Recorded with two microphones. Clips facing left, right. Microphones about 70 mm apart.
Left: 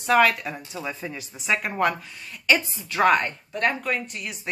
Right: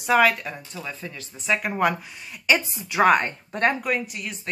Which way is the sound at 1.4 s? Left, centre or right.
Centre.